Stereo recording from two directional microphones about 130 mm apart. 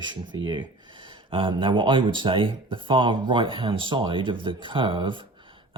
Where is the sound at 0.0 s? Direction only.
35° right (ahead or behind).